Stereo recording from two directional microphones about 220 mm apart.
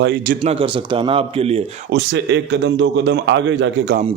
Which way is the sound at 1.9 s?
50° right (ahead or behind).